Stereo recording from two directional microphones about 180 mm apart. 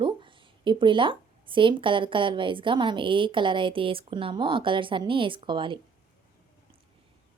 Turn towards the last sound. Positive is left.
turn(degrees=-25)  # may be behind; listen again after turning